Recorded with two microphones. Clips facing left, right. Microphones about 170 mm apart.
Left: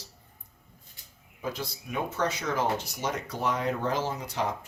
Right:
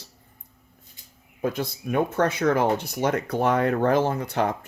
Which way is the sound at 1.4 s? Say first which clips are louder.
Right 8 dB; 55° right (ahead or behind).